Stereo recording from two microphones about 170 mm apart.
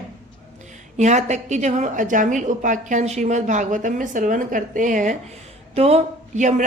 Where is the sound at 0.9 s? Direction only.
45° right (ahead or behind).